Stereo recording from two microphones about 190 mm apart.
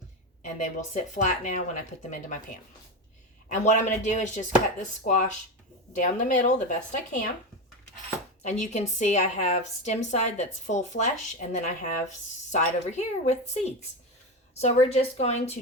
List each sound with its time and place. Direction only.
0.4 s a woman's voice: 40° left (ahead or behind)
3.5 s a woman's voice: 40° left (ahead or behind)
8.4 s a woman's voice: 40° left (ahead or behind)